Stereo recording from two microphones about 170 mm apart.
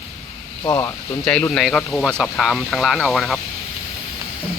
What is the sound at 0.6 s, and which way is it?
Speech, 20° left (ahead or behind).